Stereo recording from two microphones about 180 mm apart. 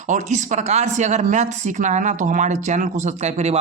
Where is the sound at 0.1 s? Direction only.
40° right (ahead or behind).